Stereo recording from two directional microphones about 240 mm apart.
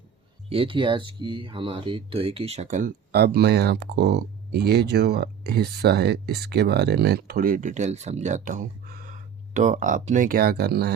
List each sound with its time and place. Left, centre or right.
0.5 s speech: right